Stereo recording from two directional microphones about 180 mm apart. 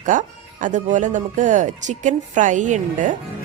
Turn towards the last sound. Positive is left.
turn(degrees=-45)  # may be behind; listen again after turning